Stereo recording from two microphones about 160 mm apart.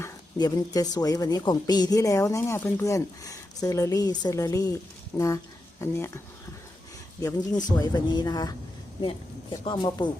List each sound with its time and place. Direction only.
0.0 s speech: 25° left (ahead or behind)
7.2 s speech: 25° left (ahead or behind)